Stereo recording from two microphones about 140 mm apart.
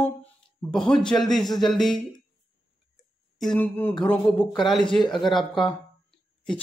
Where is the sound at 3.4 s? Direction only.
10° left (ahead or behind).